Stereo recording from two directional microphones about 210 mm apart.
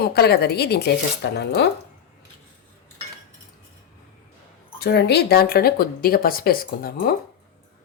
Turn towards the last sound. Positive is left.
turn(degrees=45)  # may be behind; listen again after turning